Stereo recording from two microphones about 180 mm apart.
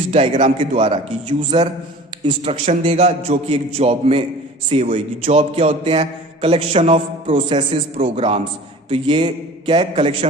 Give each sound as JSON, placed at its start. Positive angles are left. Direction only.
{"t": 0.1, "sound": "a man's voice", "side_deg": -35}